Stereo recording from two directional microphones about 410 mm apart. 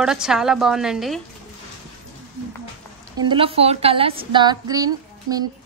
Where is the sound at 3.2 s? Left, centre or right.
Centre.